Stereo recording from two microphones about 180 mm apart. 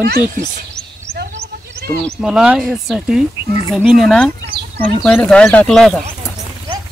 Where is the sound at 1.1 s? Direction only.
60° right (ahead or behind).